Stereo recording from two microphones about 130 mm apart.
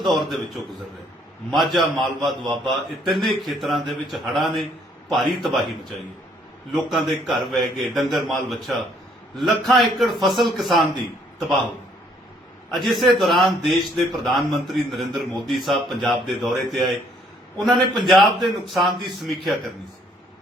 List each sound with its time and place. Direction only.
0.0 s a man's voice: centre (ahead or behind)
6.7 s a man's voice: centre (ahead or behind)
12.7 s a man's voice: centre (ahead or behind)
17.7 s a man's voice: 35° right (ahead or behind)
18.7 s a man's voice: centre (ahead or behind)